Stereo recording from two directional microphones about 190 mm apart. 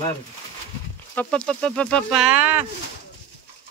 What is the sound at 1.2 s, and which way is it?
Speech, 5° left (ahead or behind).